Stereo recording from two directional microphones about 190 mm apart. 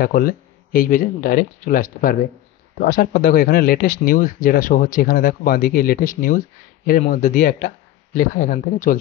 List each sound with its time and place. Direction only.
0.0 s speech: 50° left (ahead or behind)